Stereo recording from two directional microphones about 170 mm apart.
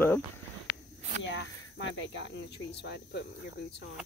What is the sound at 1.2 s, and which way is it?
Speech, 90° left.